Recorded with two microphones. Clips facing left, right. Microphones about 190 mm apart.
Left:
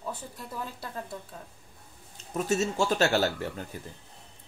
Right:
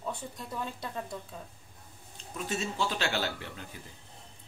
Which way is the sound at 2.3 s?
45° left (ahead or behind).